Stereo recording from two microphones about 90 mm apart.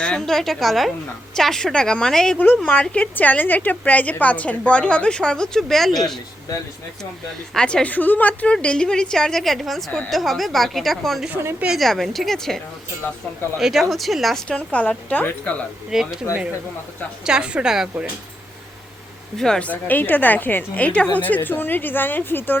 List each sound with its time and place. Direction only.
0.0 s a woman's voice: 5° left (ahead or behind)
7.5 s a woman's voice: 10° left (ahead or behind)
13.6 s a woman's voice: 5° right (ahead or behind)
14.4 s a woman's voice: 10° left (ahead or behind)
15.9 s a woman's voice: 5° right (ahead or behind)
17.2 s a woman's voice: 10° right (ahead or behind)
19.4 s a woman's voice: 10° left (ahead or behind)